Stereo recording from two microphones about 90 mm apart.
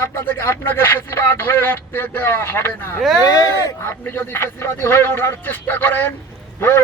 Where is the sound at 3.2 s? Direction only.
40° left (ahead or behind).